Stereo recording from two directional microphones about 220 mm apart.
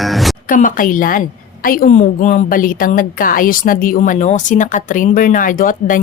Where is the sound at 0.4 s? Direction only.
35° left (ahead or behind).